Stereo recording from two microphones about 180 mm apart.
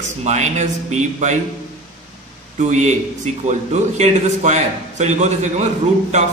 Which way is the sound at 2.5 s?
40° right (ahead or behind).